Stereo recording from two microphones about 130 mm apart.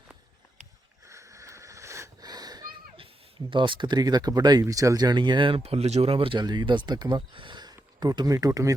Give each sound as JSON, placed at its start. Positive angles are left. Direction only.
{"t": 1.0, "sound": "wheeze", "side_deg": -25}
{"t": 3.5, "sound": "speech", "side_deg": -40}